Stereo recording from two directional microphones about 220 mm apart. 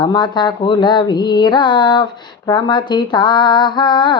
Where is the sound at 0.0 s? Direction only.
20° left (ahead or behind).